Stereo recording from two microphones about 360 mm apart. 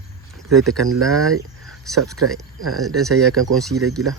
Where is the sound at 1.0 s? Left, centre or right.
Centre.